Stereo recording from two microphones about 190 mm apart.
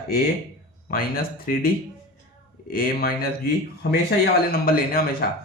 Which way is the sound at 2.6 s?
50° left (ahead or behind).